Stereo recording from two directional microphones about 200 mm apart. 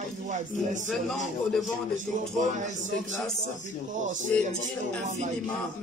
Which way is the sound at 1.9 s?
40° right (ahead or behind).